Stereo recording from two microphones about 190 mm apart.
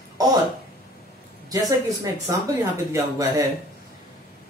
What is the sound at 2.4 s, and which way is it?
Speech, 15° right (ahead or behind).